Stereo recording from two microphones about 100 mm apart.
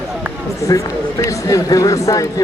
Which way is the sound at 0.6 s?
30° left (ahead or behind).